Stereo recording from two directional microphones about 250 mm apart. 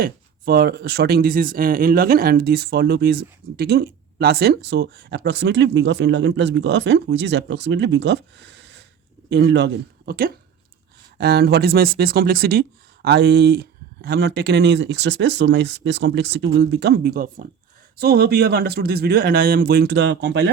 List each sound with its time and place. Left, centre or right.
0.0 s speech: right